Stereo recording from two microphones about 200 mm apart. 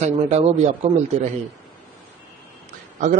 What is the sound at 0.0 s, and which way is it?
Speech, 30° right (ahead or behind).